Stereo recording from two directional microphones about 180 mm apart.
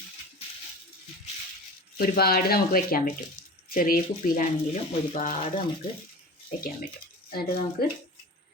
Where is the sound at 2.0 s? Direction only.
55° left (ahead or behind); by 5.5 s 40° left (ahead or behind).